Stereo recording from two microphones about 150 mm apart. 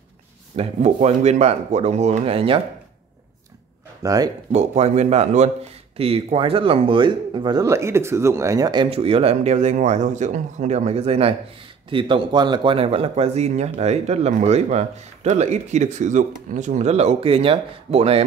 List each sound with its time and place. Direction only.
0.6 s speech: 45° right (ahead or behind)
4.0 s speech: 25° right (ahead or behind)
4.5 s speech: 45° right (ahead or behind); by 7.6 s 30° right (ahead or behind)
7.6 s speech: 20° right (ahead or behind)
8.9 s speech: 40° right (ahead or behind)